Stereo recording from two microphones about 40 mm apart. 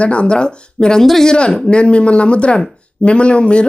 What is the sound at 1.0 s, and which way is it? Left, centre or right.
Speech, centre.